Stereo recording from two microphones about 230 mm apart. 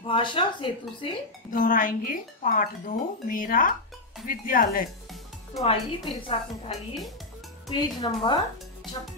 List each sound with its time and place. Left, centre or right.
0.0 s speech: left
1.5 s speech: left
5.6 s speech: left